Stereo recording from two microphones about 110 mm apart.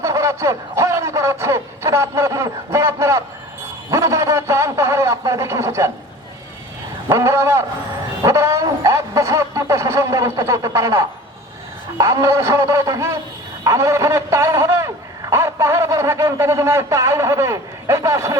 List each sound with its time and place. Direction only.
0.0 s a sound: 25° right (ahead or behind)
3.9 s speech: 30° right (ahead or behind)
7.1 s speech: 25° right (ahead or behind)